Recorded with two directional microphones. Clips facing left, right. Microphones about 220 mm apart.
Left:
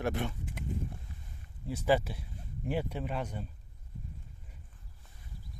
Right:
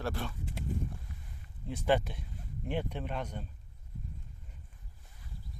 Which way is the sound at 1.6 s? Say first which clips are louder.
Left 1 dB; 5° left (ahead or behind).